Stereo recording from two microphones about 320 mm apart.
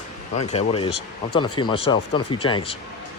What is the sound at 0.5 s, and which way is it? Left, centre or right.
Speech, centre.